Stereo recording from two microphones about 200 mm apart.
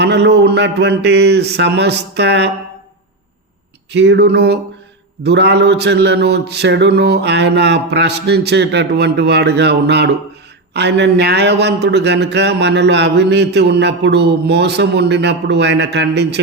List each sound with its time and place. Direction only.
0.0 s speech: 60° right (ahead or behind)
3.9 s speech: 60° right (ahead or behind)